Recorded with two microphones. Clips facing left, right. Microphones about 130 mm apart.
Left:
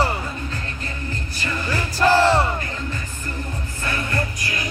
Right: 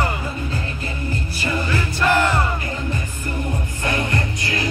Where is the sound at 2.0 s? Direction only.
35° left (ahead or behind).